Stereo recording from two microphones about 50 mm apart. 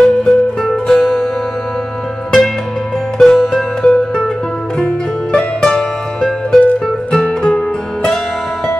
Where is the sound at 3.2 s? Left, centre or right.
Centre.